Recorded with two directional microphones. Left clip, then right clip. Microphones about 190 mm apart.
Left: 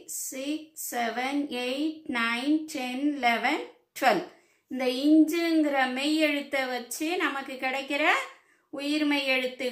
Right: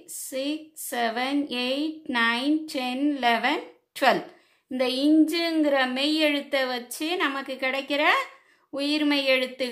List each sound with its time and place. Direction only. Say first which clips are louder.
0.3 s a woman's voice: right 5 dB; 45° right (ahead or behind)
5.3 s a woman's voice: right 2 dB; 50° right (ahead or behind)